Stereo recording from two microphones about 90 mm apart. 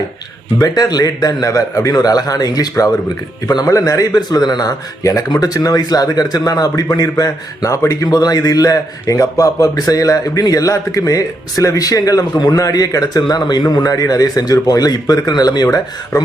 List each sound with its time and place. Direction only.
0.6 s a man's voice: 45° left (ahead or behind)